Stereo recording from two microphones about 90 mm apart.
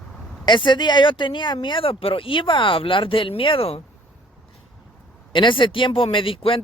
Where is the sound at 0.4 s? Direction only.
60° left (ahead or behind); by 3.8 s 85° left.